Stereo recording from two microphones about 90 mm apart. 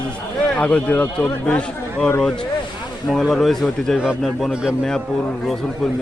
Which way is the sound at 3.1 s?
5° left (ahead or behind).